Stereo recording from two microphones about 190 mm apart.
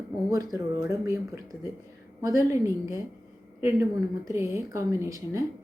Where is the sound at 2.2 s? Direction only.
15° right (ahead or behind).